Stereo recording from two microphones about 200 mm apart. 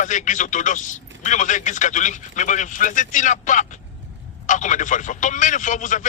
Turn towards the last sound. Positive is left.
turn(degrees=40)  # may be behind; listen again after turning